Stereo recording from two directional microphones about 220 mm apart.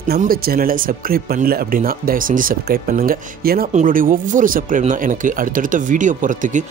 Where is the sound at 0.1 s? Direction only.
40° right (ahead or behind).